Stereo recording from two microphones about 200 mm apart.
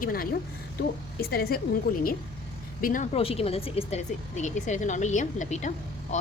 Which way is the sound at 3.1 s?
30° left (ahead or behind).